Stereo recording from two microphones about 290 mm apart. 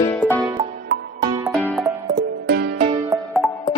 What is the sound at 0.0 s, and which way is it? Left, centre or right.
Music, centre.